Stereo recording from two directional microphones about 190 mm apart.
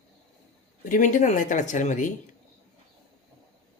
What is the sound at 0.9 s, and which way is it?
Speech, 40° left (ahead or behind).